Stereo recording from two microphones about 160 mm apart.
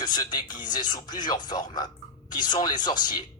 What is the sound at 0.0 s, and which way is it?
Speech, 25° left (ahead or behind).